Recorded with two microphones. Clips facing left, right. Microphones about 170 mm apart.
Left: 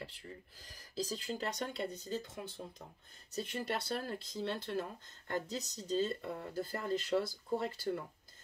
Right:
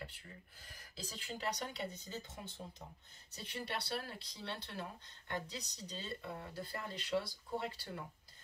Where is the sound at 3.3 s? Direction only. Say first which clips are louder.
Left 6 dB; 50° left (ahead or behind).